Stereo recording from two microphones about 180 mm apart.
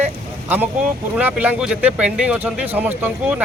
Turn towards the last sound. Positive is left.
turn(degrees=-10)  # may be behind; listen again after turning